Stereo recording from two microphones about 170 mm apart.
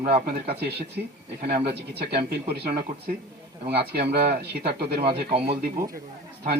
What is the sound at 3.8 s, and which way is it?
Speech, 70° right (ahead or behind).